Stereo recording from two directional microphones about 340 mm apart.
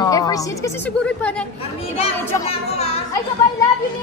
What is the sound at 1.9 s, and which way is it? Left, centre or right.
Speech, centre.